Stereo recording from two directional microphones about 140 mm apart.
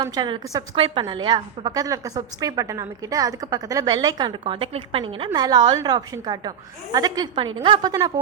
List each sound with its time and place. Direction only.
0.0 s a woman's voice: 30° right (ahead or behind)